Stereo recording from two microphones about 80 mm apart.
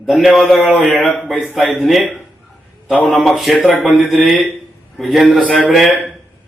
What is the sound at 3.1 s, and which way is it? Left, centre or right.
A man's voice, centre.